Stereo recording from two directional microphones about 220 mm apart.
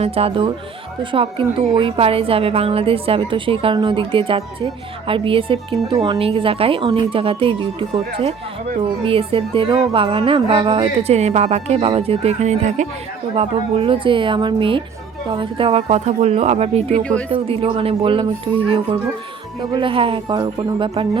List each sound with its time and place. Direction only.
0.0 s a woman's voice: 25° right (ahead or behind)
17.0 s speech: 5° left (ahead or behind)
17.2 s a woman's voice: 25° right (ahead or behind)
19.7 s a woman's voice: 25° right (ahead or behind)